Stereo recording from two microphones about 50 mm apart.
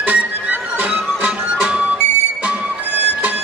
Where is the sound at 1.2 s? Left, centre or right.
Right.